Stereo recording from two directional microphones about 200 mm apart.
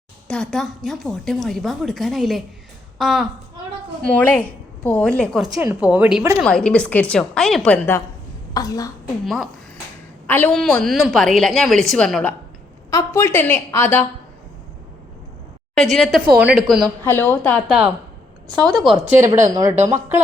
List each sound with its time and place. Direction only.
0.3 s a woman's voice: centre (ahead or behind); by 8.9 s 20° left (ahead or behind)
9.2 s a woman's voice: centre (ahead or behind)
12.9 s a woman's voice: 15° left (ahead or behind)
15.7 s a woman's voice: 5° left (ahead or behind)
19.0 s a woman's voice: 15° right (ahead or behind)